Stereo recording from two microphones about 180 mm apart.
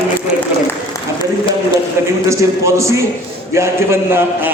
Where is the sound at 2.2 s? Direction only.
15° right (ahead or behind).